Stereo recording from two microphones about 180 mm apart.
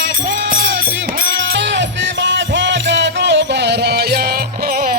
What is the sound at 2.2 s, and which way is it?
Music, 80° right.